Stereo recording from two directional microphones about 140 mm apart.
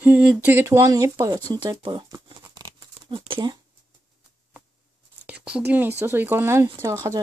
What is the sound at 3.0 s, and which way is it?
Speech, 40° right (ahead or behind).